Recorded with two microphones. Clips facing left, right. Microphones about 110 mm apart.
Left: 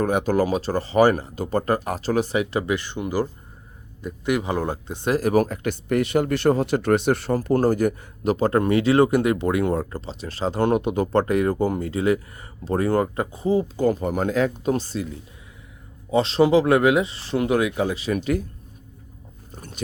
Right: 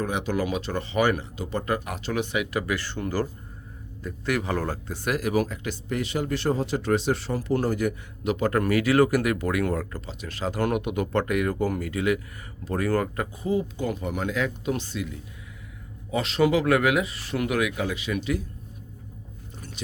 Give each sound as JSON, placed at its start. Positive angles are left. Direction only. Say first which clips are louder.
{"t": 0.0, "sound": "speech", "louder": "left 6 dB", "side_deg": 45}
{"t": 5.1, "sound": "speech", "louder": "left 6 dB", "side_deg": 40}
{"t": 19.5, "sound": "a sound", "louder": "left 2 dB", "side_deg": 50}